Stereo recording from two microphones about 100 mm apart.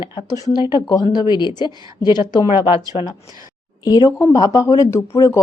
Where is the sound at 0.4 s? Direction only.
45° left (ahead or behind).